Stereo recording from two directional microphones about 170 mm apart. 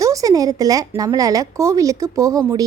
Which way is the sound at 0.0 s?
20° right (ahead or behind).